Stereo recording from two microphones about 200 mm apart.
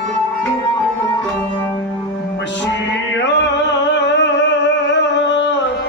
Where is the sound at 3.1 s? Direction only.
65° left (ahead or behind).